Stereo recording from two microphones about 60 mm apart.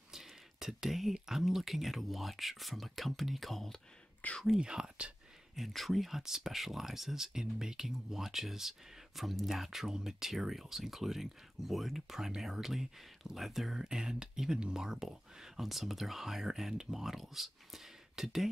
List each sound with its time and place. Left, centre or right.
0.1 s speech: centre
4.2 s speech: left
4.6 s speech: centre
5.6 s speech: centre